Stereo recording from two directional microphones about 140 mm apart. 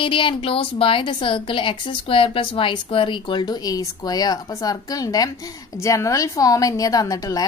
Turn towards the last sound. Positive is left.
turn(degrees=25)  # may be behind; listen again after turning